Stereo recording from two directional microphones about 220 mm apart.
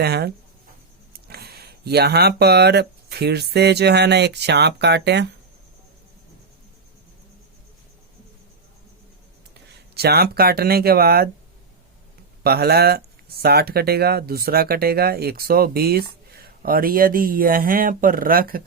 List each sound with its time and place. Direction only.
0.0 s speech: 45° right (ahead or behind)
9.9 s speech: 45° right (ahead or behind)
12.4 s speech: 45° right (ahead or behind)